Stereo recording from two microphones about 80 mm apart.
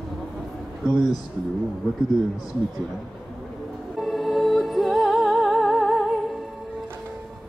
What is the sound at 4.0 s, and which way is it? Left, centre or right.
Music, centre.